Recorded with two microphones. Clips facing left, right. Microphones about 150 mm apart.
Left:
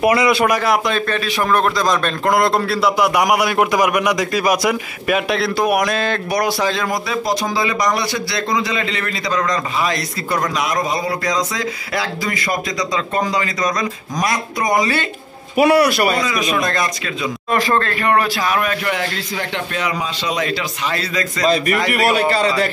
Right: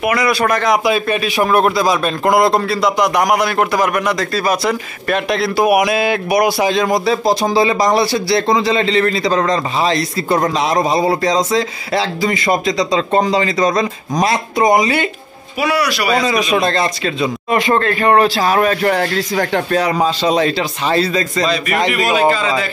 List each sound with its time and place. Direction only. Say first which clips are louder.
0.0 s speech: left 1 dB; 25° left (ahead or behind)
0.5 s a man's voice: right 2 dB; 5° left (ahead or behind)
0.8 s a man's voice: right 4 dB; 10° right (ahead or behind)
15.5 s a man's voice: left 4 dB; 55° left (ahead or behind)
16.2 s a man's voice: right 4 dB; 30° right (ahead or behind)